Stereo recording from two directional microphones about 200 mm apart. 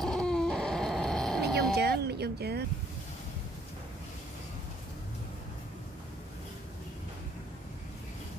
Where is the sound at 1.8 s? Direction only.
55° right (ahead or behind).